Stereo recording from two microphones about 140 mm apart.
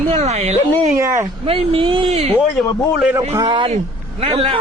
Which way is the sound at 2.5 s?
Centre (ahead or behind).